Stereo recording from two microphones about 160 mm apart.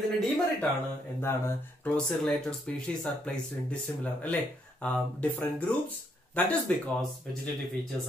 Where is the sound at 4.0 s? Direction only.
10° left (ahead or behind).